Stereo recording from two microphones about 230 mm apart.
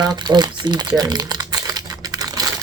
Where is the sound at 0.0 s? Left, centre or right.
Centre.